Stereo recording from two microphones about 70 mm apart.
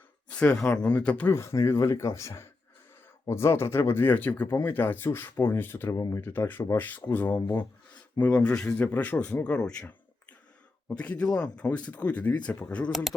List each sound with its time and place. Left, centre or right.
0.3 s speech: centre
1.3 s speech: left
5.9 s speech: left
6.2 s speech: left
10.9 s speech: centre